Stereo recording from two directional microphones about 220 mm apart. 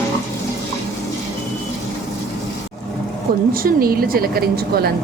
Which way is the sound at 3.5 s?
40° right (ahead or behind).